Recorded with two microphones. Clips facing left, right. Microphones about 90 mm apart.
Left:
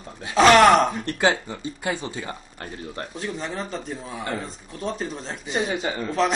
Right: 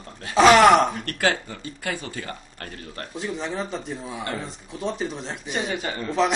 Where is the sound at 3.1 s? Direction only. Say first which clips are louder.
Right 3 dB; centre (ahead or behind).